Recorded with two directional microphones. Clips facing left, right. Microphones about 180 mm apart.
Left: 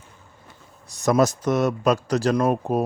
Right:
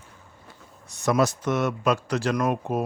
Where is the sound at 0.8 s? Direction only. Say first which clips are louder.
Left 3 dB; 40° left (ahead or behind).